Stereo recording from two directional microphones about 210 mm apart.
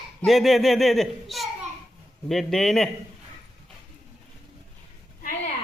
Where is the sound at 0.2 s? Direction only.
Centre (ahead or behind).